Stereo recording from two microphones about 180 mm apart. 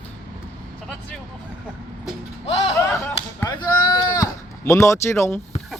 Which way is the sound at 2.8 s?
15° left (ahead or behind).